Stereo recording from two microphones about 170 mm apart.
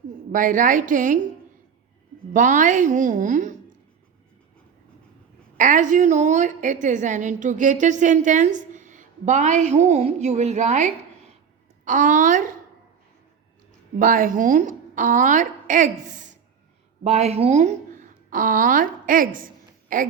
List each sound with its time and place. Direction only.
0.3 s a woman's voice: 50° right (ahead or behind)
2.3 s a woman's voice: 50° right (ahead or behind)
5.5 s a woman's voice: 50° right (ahead or behind)
14.0 s a woman's voice: 50° right (ahead or behind)